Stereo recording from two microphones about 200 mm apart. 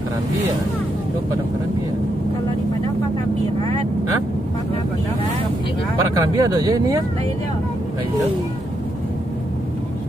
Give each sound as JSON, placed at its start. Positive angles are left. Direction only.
{"t": 6.1, "sound": "speech", "side_deg": -20}